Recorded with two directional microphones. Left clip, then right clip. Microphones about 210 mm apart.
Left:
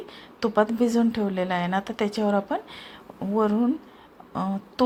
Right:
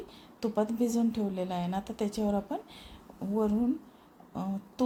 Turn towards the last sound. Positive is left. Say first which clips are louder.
# left 9 dB
turn(degrees=5)  # may be behind; listen again after turning